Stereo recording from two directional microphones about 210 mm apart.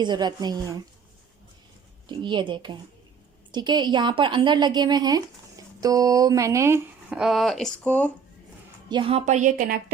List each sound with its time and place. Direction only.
0.0 s a woman's voice: 20° right (ahead or behind)
2.0 s a woman's voice: 20° right (ahead or behind); by 8.1 s 5° left (ahead or behind)
8.9 s a woman's voice: 25° right (ahead or behind)